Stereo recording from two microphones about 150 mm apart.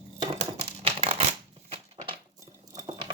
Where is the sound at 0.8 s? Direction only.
40° right (ahead or behind).